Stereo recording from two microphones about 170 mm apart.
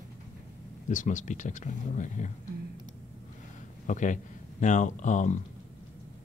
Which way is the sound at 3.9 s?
50° left (ahead or behind).